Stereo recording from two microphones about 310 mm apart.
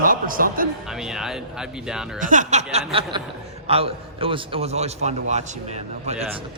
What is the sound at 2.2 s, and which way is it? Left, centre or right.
A man's voice, right.